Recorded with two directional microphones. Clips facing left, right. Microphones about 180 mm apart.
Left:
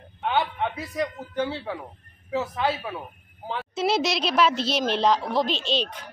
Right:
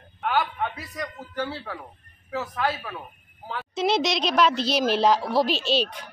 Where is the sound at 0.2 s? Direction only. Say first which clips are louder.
Even; 20° left (ahead or behind).